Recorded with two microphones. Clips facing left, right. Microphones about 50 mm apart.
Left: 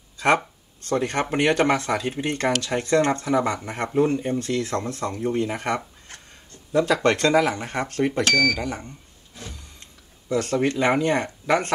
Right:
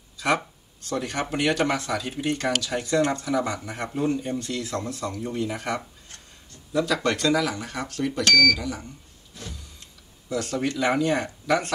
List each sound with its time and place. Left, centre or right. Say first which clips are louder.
0.8 s speech: left 5 dB; left
9.3 s power windows: even; centre
10.3 s speech: left 4 dB; left